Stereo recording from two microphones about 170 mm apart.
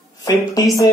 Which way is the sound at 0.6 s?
25° left (ahead or behind).